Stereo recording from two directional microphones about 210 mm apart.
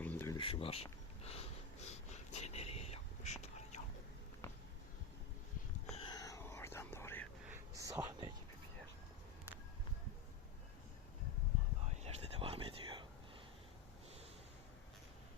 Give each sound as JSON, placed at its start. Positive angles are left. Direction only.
{"t": 0.0, "sound": "a sound", "side_deg": 10}
{"t": 0.3, "sound": "sniff", "side_deg": 25}
{"t": 5.9, "sound": "whispering", "side_deg": 25}
{"t": 7.8, "sound": "whispering", "side_deg": -15}
{"t": 12.0, "sound": "whispering", "side_deg": -25}